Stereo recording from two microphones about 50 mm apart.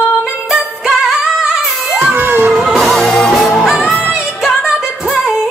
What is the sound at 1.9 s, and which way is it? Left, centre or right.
Music, centre.